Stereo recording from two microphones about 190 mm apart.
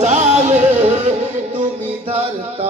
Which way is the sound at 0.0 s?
35° right (ahead or behind).